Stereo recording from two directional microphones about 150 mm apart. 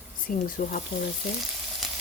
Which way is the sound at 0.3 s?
70° left (ahead or behind).